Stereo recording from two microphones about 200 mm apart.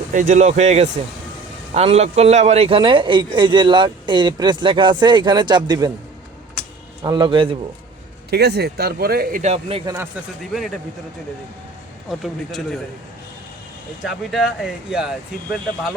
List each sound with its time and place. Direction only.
0.1 s a man's voice: 40° right (ahead or behind); by 5.9 s 20° right (ahead or behind)
7.0 s a man's voice: 20° right (ahead or behind)
8.3 s speech: 55° right (ahead or behind)
9.4 s a man's voice: 30° right (ahead or behind)
12.0 s speech: centre (ahead or behind)
14.0 s speech: centre (ahead or behind)